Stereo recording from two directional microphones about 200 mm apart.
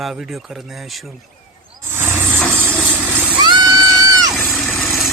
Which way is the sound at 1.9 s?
10° right (ahead or behind).